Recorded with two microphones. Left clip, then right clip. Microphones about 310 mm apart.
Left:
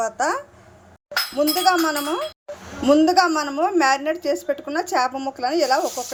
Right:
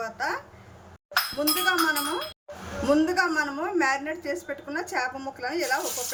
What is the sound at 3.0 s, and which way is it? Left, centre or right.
A woman's voice, centre.